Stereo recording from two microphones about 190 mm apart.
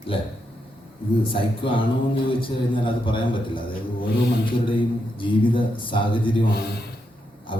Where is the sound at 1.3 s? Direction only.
25° left (ahead or behind).